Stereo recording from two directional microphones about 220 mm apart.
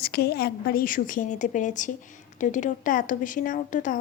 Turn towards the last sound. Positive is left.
turn(degrees=35)  # may be behind; listen again after turning